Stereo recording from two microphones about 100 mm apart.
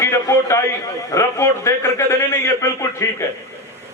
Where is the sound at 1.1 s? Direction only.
30° left (ahead or behind).